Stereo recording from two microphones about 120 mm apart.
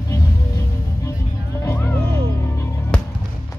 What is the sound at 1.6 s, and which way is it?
Music, 20° left (ahead or behind).